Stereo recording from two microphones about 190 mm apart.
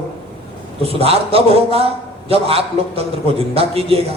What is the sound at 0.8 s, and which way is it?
A man's voice, 30° right (ahead or behind).